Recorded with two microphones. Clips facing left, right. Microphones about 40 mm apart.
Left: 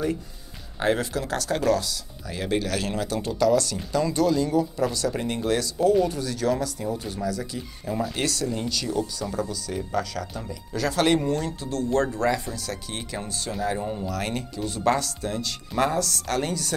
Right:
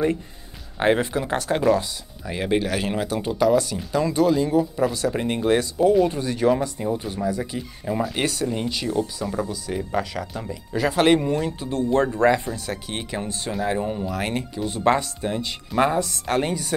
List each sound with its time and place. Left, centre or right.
0.7 s speech: right